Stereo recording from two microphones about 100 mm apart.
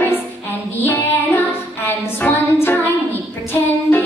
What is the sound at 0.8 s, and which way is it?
Child singing, 20° left (ahead or behind).